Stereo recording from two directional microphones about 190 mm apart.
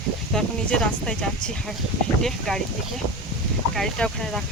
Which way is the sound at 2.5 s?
5° left (ahead or behind).